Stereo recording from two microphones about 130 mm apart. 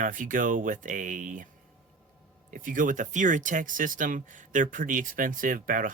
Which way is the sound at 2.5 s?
90° right.